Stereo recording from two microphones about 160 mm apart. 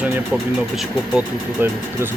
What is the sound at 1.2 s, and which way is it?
Speech, 15° right (ahead or behind).